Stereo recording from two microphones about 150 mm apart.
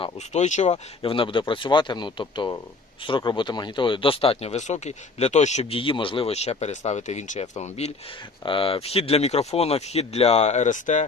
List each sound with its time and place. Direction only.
0.3 s speech: 50° left (ahead or behind)
0.7 s speech: 35° left (ahead or behind)
8.4 s speech: 35° left (ahead or behind); by 11.0 s 55° left (ahead or behind)